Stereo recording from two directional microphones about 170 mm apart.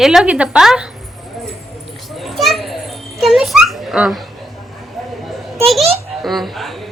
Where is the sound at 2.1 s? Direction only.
Centre (ahead or behind).